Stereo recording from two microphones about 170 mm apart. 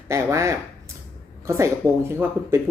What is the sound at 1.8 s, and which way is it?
Speech, 20° right (ahead or behind).